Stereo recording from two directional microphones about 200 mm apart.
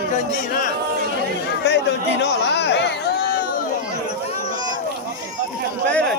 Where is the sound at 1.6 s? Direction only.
60° left (ahead or behind).